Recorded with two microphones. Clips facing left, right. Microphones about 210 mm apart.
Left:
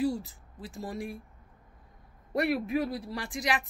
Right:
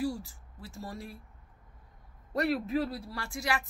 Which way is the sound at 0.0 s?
20° left (ahead or behind).